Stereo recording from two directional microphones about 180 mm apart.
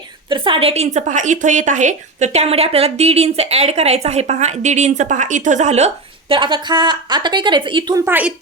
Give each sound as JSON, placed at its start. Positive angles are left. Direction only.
{"t": 0.3, "sound": "a woman's voice", "side_deg": -25}
{"t": 8.0, "sound": "speech", "side_deg": -10}